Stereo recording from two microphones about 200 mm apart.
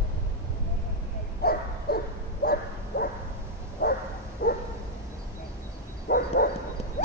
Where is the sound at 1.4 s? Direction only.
50° left (ahead or behind).